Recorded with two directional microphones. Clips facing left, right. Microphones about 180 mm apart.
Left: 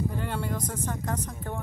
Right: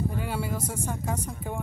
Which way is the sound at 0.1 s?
10° right (ahead or behind).